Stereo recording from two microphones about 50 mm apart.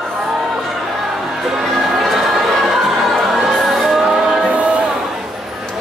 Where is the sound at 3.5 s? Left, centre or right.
Centre.